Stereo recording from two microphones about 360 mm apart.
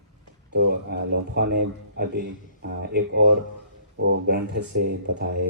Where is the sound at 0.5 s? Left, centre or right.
Right.